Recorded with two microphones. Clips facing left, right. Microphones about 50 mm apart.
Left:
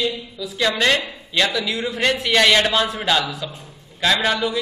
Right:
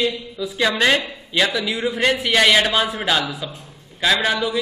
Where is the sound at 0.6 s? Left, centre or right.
Centre.